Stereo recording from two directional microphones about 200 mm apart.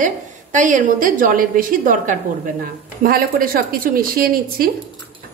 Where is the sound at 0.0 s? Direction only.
40° right (ahead or behind).